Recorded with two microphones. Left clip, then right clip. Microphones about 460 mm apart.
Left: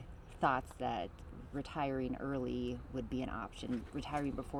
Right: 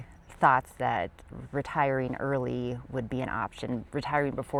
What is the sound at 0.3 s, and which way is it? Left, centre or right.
Speech, right.